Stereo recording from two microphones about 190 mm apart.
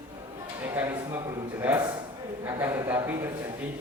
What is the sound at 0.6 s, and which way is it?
Speech, 10° right (ahead or behind).